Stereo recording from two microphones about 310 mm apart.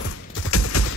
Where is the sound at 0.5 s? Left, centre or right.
Left.